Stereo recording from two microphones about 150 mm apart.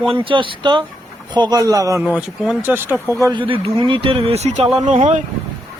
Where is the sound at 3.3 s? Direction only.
35° right (ahead or behind).